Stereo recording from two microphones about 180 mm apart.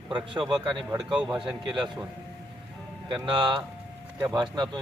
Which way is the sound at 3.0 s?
25° right (ahead or behind).